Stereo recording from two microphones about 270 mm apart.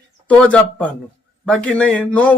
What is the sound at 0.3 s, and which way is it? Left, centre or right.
Speech, centre.